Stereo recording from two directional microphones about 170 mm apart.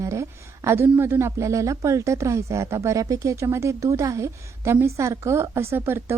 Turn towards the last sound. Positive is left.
turn(degrees=-15)  # may be behind; listen again after turning